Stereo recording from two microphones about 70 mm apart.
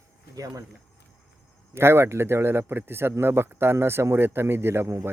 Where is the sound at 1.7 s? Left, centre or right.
Right.